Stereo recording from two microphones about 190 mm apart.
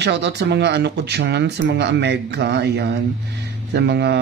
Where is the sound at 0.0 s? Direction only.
60° right (ahead or behind).